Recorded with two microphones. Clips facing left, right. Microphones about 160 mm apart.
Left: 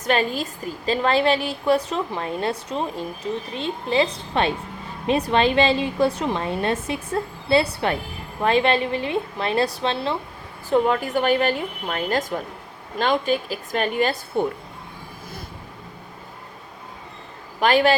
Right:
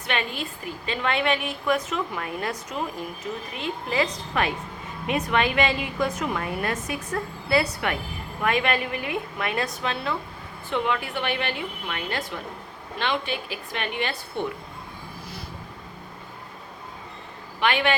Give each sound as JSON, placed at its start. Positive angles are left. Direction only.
{"t": 0.0, "sound": "a woman's voice", "side_deg": 40}
{"t": 10.7, "sound": "a woman's voice", "side_deg": 40}
{"t": 17.6, "sound": "a woman's voice", "side_deg": 40}